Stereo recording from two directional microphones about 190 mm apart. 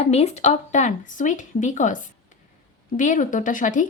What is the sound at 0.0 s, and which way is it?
A woman's voice, 35° left (ahead or behind).